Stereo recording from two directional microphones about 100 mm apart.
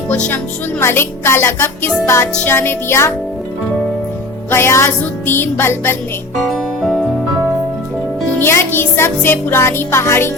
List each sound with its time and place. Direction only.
0.1 s speech: 15° left (ahead or behind)
0.8 s music: 25° left (ahead or behind)
4.5 s music: 25° left (ahead or behind)
6.4 s music: centre (ahead or behind)
8.4 s music: 20° left (ahead or behind)